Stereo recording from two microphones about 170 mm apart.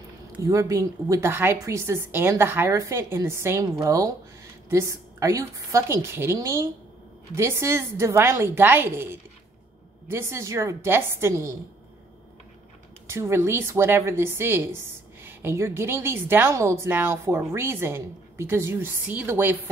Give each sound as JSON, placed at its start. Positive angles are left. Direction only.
{"t": 0.3, "sound": "a woman's voice", "side_deg": -20}
{"t": 13.0, "sound": "a woman's voice", "side_deg": -15}